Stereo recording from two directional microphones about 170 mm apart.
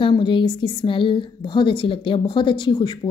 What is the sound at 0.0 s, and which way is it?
A woman's voice, 30° left (ahead or behind).